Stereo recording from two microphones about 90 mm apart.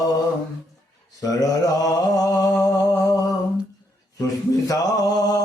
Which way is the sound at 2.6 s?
40° left (ahead or behind).